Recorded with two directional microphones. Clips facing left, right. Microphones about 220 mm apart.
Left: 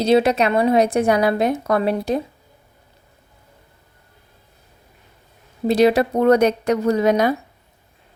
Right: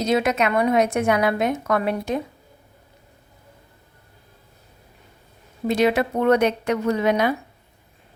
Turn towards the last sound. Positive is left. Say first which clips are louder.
# left 3 dB
turn(degrees=40)  # may be behind; listen again after turning